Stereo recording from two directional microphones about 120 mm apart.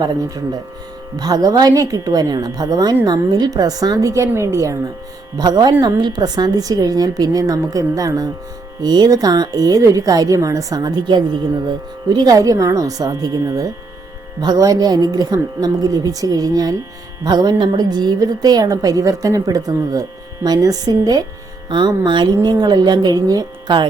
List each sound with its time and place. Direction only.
0.0 s a woman's voice: 30° right (ahead or behind)